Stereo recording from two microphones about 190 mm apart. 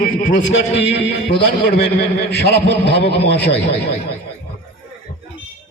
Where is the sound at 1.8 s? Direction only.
60° left (ahead or behind).